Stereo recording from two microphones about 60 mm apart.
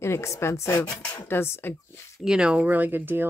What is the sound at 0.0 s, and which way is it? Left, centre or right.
Speech, left.